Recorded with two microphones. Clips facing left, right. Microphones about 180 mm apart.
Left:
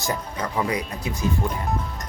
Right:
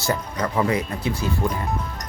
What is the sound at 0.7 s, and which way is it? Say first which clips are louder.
Speech: right 4 dB; 30° right (ahead or behind).